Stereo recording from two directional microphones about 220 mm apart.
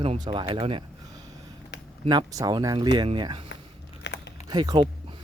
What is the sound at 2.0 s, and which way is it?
Speech, 20° right (ahead or behind).